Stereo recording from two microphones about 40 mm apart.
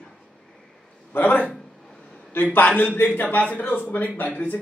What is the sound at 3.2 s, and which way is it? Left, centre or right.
Speech, left.